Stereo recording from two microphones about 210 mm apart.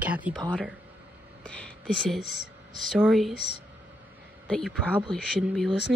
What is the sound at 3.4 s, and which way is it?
Speech, 50° left (ahead or behind).